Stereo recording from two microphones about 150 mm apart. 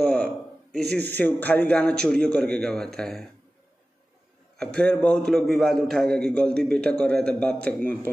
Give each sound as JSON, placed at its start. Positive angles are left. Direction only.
{"t": 0.0, "sound": "a sound", "side_deg": 5}
{"t": 0.7, "sound": "speech", "side_deg": -90}
{"t": 1.0, "sound": "a man's voice", "side_deg": 10}
{"t": 4.7, "sound": "a man's voice", "side_deg": 10}